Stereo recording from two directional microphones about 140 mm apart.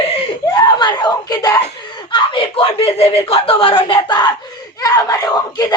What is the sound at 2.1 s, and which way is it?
Speech, 35° left (ahead or behind).